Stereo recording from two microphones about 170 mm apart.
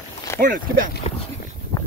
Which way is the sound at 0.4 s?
55° right (ahead or behind).